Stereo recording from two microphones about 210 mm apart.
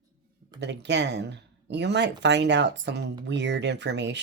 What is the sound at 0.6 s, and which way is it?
Speech, 55° right (ahead or behind).